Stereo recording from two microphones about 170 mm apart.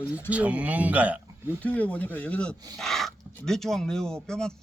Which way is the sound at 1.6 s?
10° left (ahead or behind).